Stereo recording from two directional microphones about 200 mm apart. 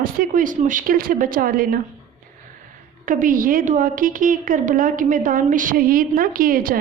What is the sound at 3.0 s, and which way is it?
A woman's voice, 45° right (ahead or behind).